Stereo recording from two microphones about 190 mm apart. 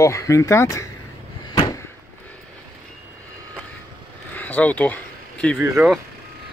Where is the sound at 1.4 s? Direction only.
20° left (ahead or behind).